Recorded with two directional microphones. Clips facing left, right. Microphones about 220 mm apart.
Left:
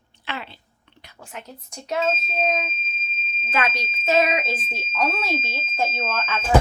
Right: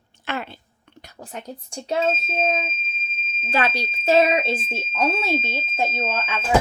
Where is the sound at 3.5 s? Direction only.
30° right (ahead or behind).